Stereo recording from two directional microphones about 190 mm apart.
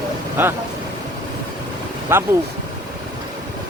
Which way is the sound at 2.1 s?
10° right (ahead or behind).